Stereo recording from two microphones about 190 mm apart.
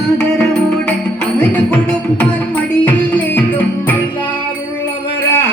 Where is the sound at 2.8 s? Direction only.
10° left (ahead or behind).